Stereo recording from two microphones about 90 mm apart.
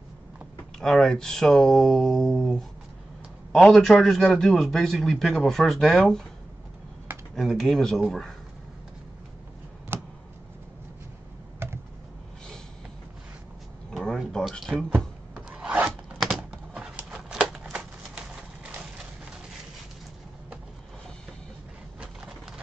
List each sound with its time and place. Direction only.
0.7 s a man's voice: 5° left (ahead or behind)
7.3 s a man's voice: centre (ahead or behind)
9.9 s a sound: 25° right (ahead or behind)
11.6 s computer keyboard: 30° right (ahead or behind)
13.9 s a sound: centre (ahead or behind)
14.3 s speech: 5° left (ahead or behind)
15.3 s filing: 10° right (ahead or behind)
16.3 s typing: 15° right (ahead or behind)
17.1 s a sound: 5° right (ahead or behind)